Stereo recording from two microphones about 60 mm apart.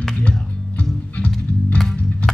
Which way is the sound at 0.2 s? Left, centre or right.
Left.